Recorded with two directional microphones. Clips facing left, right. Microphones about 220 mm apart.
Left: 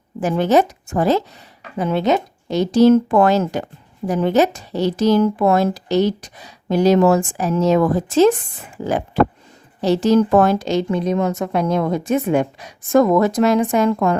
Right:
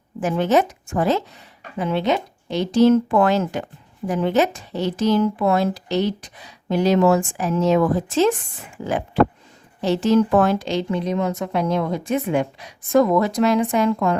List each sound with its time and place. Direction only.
0.2 s a woman's voice: 35° left (ahead or behind)
9.8 s a woman's voice: 40° left (ahead or behind)